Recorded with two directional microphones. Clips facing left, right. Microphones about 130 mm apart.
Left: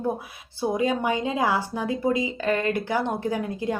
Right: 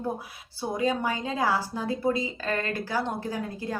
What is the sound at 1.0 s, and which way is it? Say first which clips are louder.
A woman's voice: left 4 dB; 20° left (ahead or behind).